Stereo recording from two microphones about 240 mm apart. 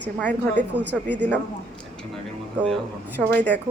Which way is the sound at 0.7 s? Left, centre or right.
Centre.